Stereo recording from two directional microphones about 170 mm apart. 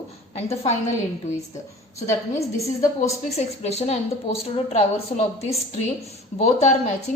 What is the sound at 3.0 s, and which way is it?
A woman's voice, 40° left (ahead or behind).